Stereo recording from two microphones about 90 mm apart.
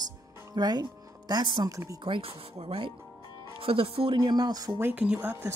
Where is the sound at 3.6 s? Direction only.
90° right.